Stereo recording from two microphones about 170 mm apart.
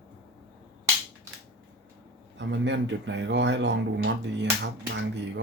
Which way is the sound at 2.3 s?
90° right.